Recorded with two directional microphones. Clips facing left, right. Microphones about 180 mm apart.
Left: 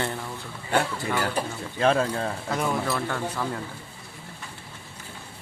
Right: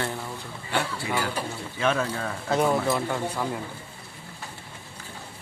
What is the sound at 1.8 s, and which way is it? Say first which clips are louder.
Speech: left 3 dB; 30° left (ahead or behind).